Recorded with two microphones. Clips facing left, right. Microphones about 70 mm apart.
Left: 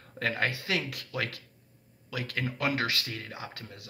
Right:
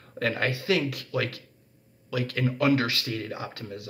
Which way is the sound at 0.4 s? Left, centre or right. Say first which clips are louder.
Right 7 dB; left.